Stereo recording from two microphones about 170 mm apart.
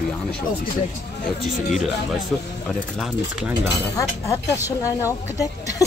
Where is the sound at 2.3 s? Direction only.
5° left (ahead or behind).